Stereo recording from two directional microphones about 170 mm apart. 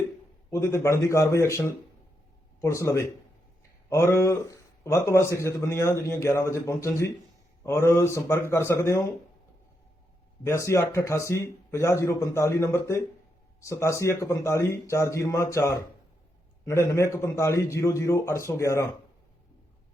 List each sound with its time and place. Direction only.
0.5 s a man's voice: 15° left (ahead or behind)
10.4 s a man's voice: 15° left (ahead or behind)